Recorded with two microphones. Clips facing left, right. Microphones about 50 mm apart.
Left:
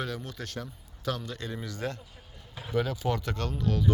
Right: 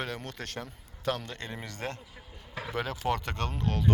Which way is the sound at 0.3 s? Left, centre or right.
Right.